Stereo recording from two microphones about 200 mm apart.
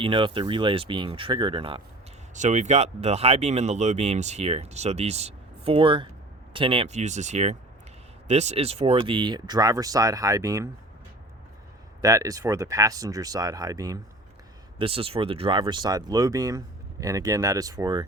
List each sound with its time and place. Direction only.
0.0 s speech: 25° right (ahead or behind)
2.3 s speech: 35° right (ahead or behind); by 10.7 s 15° right (ahead or behind)
12.0 s speech: 15° right (ahead or behind)